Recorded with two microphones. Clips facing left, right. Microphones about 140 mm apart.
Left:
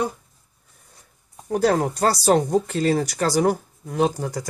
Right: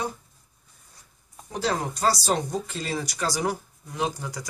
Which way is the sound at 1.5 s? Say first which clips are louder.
Left 8 dB; 55° left (ahead or behind).